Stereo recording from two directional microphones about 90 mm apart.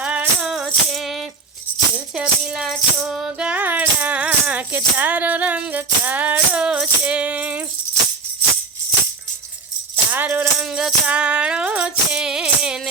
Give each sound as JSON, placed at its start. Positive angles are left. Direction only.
{"t": 0.0, "sound": "music", "side_deg": -15}
{"t": 0.5, "sound": "music", "side_deg": -5}
{"t": 2.1, "sound": "music", "side_deg": -10}
{"t": 9.9, "sound": "music", "side_deg": -20}
{"t": 10.6, "sound": "music", "side_deg": -5}